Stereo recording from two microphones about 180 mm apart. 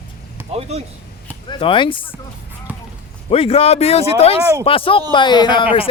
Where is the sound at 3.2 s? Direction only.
35° left (ahead or behind).